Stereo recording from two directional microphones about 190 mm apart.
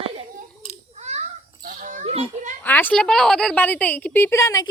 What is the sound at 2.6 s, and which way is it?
A woman's voice, 10° left (ahead or behind).